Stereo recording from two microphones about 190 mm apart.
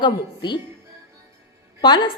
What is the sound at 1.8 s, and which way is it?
Speech, 20° left (ahead or behind).